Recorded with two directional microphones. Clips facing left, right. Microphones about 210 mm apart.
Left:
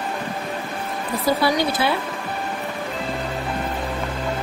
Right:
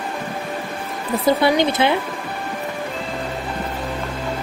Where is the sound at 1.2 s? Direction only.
20° right (ahead or behind).